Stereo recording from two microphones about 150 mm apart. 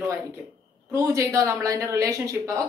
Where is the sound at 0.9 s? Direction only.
20° right (ahead or behind).